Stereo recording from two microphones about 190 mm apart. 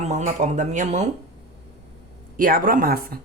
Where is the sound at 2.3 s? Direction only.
45° right (ahead or behind).